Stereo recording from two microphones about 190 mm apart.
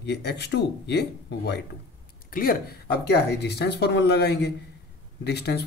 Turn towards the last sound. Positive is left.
turn(degrees=60)  # may be behind; listen again after turning